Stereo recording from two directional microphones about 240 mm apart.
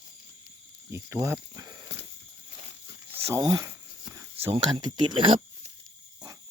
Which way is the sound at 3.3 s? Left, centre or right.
Centre.